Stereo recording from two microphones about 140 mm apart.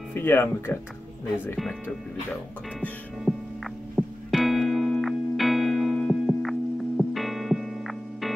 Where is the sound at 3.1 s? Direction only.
Centre (ahead or behind).